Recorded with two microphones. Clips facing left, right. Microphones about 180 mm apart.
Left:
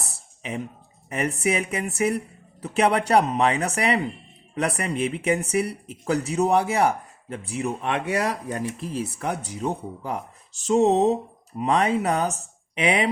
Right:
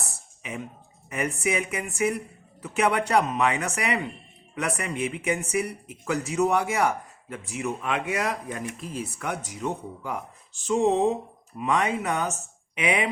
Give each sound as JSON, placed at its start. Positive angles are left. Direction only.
{"t": 1.1, "sound": "speech", "side_deg": 35}